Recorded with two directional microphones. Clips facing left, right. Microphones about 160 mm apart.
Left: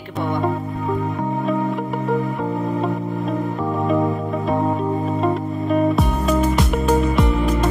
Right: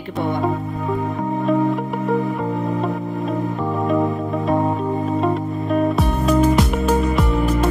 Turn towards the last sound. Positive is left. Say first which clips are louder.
# left 1 dB
turn(degrees=0)  # may be behind; listen again after turning